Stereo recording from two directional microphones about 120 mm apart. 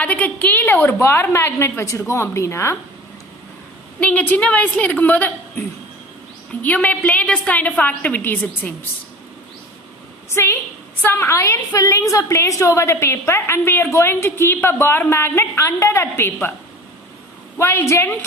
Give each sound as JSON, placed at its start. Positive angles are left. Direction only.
{"t": 0.0, "sound": "a woman's voice", "side_deg": 15}
{"t": 4.0, "sound": "a woman's voice", "side_deg": 15}
{"t": 10.3, "sound": "a woman's voice", "side_deg": 20}
{"t": 17.6, "sound": "a woman's voice", "side_deg": 25}